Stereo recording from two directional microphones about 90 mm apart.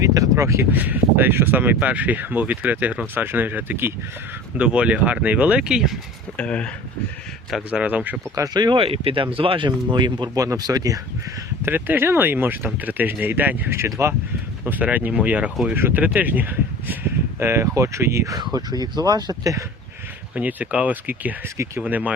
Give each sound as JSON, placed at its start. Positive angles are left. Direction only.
{"t": 0.0, "sound": "a sound", "side_deg": -35}
{"t": 0.7, "sound": "speech", "side_deg": -20}
{"t": 4.5, "sound": "speech", "side_deg": -10}
{"t": 6.3, "sound": "speech", "side_deg": 15}
{"t": 7.7, "sound": "speech", "side_deg": -15}
{"t": 8.5, "sound": "speech", "side_deg": -55}
{"t": 8.8, "sound": "speech", "side_deg": -90}
{"t": 9.6, "sound": "speech", "side_deg": -60}
{"t": 10.3, "sound": "speech", "side_deg": -40}
{"t": 11.6, "sound": "speech", "side_deg": -25}
{"t": 14.6, "sound": "speech", "side_deg": -15}
{"t": 18.5, "sound": "speech", "side_deg": -50}
{"t": 20.3, "sound": "speech", "side_deg": -15}